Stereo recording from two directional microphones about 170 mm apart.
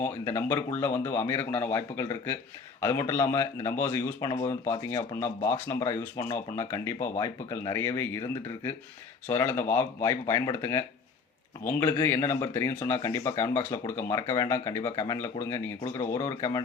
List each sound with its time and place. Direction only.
0.0 s speech: 15° left (ahead or behind)